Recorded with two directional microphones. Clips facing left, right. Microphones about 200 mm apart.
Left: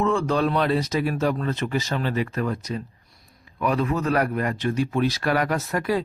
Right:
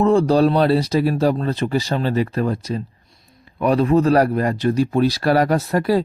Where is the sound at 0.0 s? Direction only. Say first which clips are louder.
Right 7 dB; 35° right (ahead or behind).